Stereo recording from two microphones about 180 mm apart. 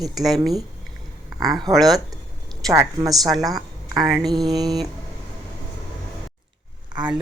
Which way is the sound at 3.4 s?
20° right (ahead or behind).